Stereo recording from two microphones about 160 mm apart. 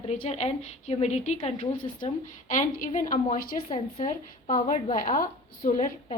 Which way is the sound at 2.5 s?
55° left (ahead or behind).